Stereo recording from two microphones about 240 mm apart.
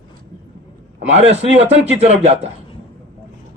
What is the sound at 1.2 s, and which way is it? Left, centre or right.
A man's voice, right.